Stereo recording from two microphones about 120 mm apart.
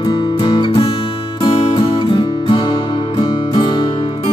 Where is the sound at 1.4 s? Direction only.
45° left (ahead or behind).